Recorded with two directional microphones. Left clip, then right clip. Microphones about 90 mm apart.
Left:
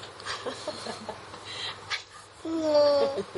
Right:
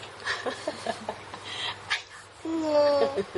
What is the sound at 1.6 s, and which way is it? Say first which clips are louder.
Dog: right 3 dB; 20° right (ahead or behind).